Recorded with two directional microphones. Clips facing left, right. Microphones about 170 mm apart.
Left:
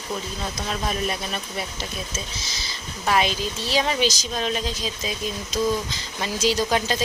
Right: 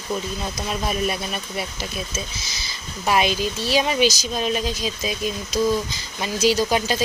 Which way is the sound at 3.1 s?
10° right (ahead or behind).